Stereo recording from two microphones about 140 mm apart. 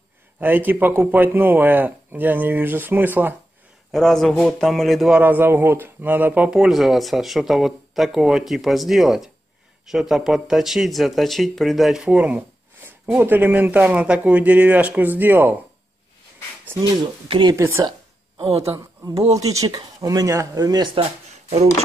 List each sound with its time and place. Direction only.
0.4 s a man's voice: 15° right (ahead or behind)
3.9 s speech: centre (ahead or behind)
5.2 s a man's voice: 15° right (ahead or behind)
16.8 s speech: 30° right (ahead or behind)
17.6 s speech: 20° right (ahead or behind)
19.5 s speech: 25° right (ahead or behind)